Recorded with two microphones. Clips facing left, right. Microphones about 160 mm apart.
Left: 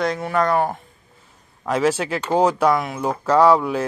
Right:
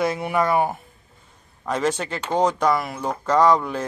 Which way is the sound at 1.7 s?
5° left (ahead or behind).